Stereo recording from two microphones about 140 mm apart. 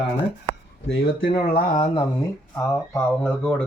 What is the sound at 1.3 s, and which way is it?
Speech, 90° left.